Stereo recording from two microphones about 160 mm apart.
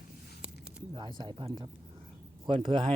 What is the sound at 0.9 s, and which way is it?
Speech, 30° right (ahead or behind).